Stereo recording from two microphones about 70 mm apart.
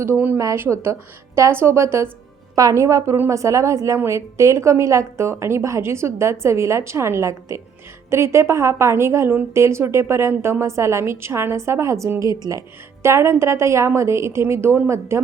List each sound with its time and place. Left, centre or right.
0.5 s a woman's voice: right